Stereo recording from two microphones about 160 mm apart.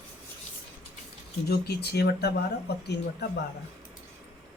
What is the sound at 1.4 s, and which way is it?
Speech, 80° left.